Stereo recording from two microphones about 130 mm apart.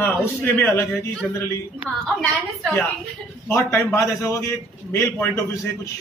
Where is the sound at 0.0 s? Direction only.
15° left (ahead or behind).